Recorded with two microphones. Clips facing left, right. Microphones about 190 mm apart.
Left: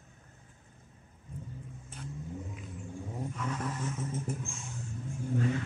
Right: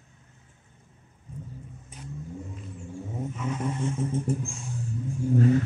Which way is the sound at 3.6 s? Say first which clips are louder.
Right 7 dB; 25° right (ahead or behind).